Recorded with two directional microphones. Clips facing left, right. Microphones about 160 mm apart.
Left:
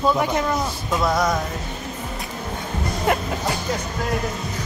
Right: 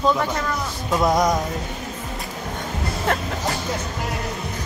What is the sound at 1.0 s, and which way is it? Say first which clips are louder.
Music: right 2 dB; 15° right (ahead or behind).